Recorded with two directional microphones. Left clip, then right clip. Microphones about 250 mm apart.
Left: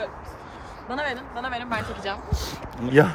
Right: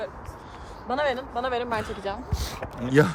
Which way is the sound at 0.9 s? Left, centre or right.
Right.